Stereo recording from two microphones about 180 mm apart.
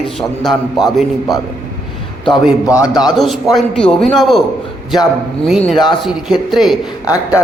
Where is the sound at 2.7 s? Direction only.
20° left (ahead or behind).